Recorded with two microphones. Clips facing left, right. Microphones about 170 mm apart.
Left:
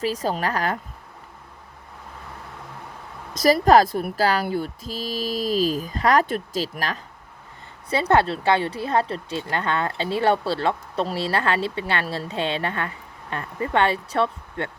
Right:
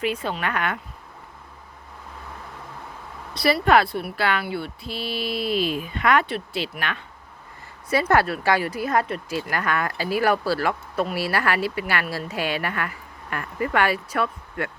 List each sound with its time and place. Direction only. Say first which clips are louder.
0.0 s speech: left 2 dB; 35° left (ahead or behind)
3.3 s speech: left 3 dB; 40° left (ahead or behind)
7.9 s speech: left 1 dB; 25° left (ahead or behind)